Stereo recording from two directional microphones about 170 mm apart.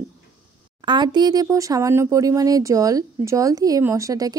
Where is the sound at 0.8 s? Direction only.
25° right (ahead or behind).